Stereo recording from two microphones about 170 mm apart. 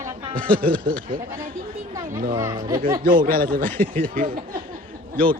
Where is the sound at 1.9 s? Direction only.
25° right (ahead or behind).